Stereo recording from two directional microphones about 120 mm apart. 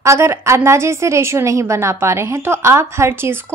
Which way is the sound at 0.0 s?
25° right (ahead or behind).